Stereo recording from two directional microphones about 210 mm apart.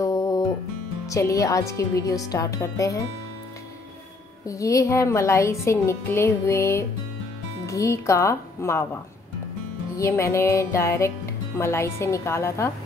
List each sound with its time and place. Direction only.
0.0 s music: 15° left (ahead or behind)
1.0 s speech: 15° left (ahead or behind)
4.5 s speech: 15° left (ahead or behind)
9.9 s speech: 15° left (ahead or behind)